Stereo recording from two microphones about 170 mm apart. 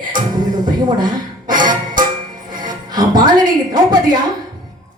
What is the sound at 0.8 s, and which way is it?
Speech, 25° right (ahead or behind).